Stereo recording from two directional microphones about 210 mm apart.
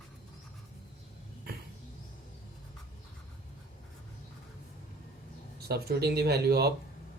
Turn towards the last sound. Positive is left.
turn(degrees=-50)  # may be behind; listen again after turning